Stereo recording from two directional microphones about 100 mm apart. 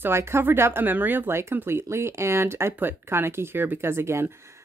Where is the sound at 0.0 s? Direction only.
25° right (ahead or behind).